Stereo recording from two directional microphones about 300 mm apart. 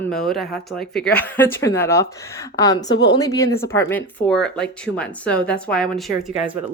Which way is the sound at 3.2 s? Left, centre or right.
Centre.